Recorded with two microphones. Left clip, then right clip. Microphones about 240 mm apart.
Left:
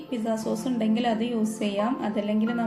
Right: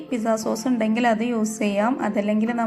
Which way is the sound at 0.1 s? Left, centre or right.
Centre.